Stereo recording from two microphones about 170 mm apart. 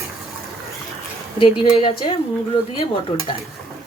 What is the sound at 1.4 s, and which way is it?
Speech, 35° left (ahead or behind).